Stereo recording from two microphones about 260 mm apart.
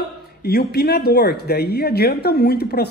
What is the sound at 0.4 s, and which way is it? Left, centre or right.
Speech, left.